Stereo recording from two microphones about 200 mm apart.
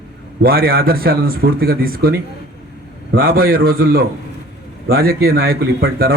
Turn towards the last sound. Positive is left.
turn(degrees=-50)  # may be behind; listen again after turning